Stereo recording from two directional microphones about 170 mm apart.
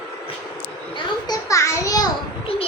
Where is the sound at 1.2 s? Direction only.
20° left (ahead or behind).